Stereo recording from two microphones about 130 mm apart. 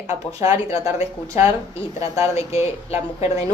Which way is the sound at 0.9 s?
25° right (ahead or behind).